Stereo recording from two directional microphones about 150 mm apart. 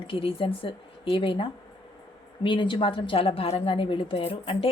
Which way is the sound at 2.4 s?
35° left (ahead or behind).